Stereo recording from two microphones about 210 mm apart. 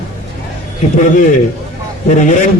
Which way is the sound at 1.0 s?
35° left (ahead or behind).